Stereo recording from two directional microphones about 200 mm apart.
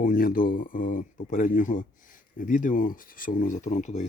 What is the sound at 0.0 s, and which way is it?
Speech, 45° left (ahead or behind).